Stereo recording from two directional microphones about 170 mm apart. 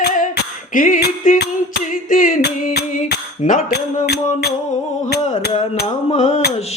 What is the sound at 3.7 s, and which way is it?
Music, 70° left (ahead or behind).